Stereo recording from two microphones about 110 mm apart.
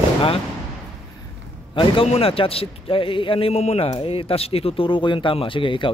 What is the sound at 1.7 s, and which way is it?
Speech, 50° left (ahead or behind).